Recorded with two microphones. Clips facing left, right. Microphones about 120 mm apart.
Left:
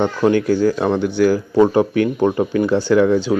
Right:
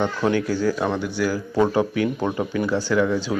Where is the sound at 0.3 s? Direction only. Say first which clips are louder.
Left 7 dB; 50° left (ahead or behind).